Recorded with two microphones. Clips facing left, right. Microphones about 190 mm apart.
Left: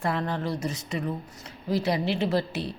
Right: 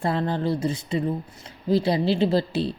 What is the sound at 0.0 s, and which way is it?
A woman's voice, 30° right (ahead or behind).